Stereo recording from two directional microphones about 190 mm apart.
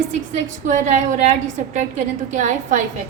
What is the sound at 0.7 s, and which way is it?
Speech, 40° right (ahead or behind).